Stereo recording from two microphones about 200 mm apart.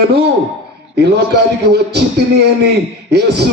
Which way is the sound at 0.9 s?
55° right (ahead or behind).